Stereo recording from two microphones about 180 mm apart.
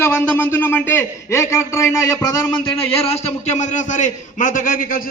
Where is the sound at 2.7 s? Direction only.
35° left (ahead or behind).